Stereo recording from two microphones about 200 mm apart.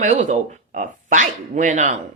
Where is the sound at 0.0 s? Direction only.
40° right (ahead or behind).